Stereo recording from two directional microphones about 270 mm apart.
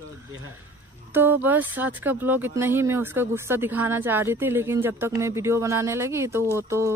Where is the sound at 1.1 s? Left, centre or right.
Centre.